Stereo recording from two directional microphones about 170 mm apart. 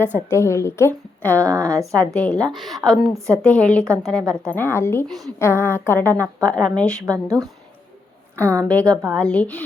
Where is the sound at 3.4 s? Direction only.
5° left (ahead or behind).